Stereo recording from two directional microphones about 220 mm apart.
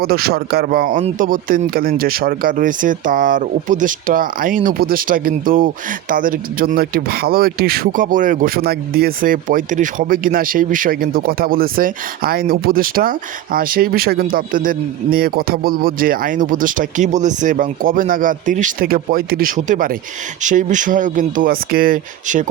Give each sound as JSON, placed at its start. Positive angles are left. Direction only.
{"t": 0.0, "sound": "a man's voice", "side_deg": -45}